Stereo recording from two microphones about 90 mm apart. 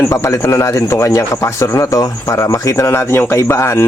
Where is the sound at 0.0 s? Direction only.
30° left (ahead or behind).